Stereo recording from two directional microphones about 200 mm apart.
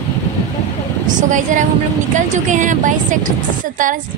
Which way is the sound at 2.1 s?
40° right (ahead or behind).